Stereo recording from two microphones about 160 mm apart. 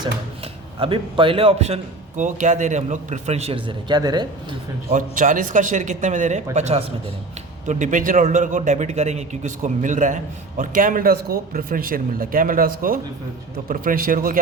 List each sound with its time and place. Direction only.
0.8 s a man's voice: 35° right (ahead or behind)
4.9 s a man's voice: 55° right (ahead or behind)